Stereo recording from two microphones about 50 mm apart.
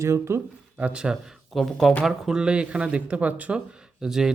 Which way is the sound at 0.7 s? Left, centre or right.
Right.